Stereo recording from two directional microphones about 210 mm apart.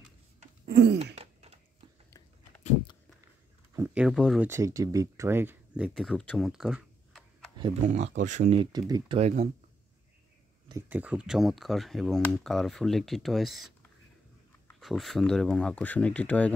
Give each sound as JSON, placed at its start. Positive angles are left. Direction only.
{"t": 1.1, "sound": "a sound", "side_deg": -30}
{"t": 3.7, "sound": "speech", "side_deg": -10}
{"t": 4.5, "sound": "speech", "side_deg": -15}
{"t": 7.8, "sound": "speech", "side_deg": -35}
{"t": 9.2, "sound": "speech", "side_deg": -35}
{"t": 10.7, "sound": "speech", "side_deg": -10}
{"t": 14.8, "sound": "speech", "side_deg": 0}